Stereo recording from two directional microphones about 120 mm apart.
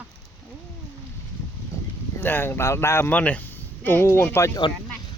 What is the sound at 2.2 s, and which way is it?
Speech, 15° left (ahead or behind).